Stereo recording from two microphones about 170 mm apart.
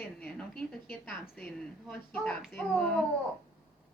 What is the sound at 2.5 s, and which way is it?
Speech, 5° left (ahead or behind).